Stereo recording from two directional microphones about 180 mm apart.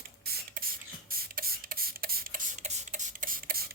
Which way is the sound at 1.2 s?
55° right (ahead or behind).